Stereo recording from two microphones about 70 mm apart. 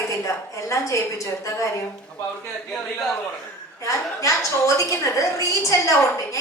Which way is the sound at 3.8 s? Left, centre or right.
Left.